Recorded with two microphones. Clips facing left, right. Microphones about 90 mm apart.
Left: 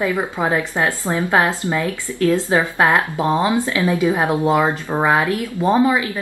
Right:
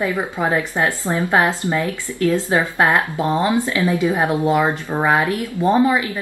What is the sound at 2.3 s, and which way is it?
Speech, 20° left (ahead or behind).